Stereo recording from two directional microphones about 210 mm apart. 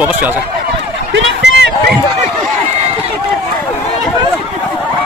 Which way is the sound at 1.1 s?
55° right (ahead or behind).